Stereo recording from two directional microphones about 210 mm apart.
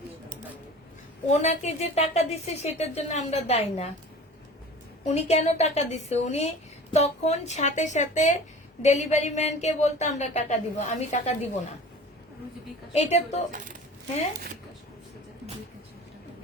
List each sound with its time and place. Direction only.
1.3 s speech: 35° left (ahead or behind)
5.0 s speech: 30° left (ahead or behind)
12.9 s speech: 30° left (ahead or behind)